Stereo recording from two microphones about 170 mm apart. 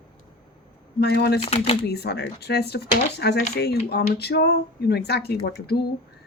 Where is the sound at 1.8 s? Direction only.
70° left (ahead or behind).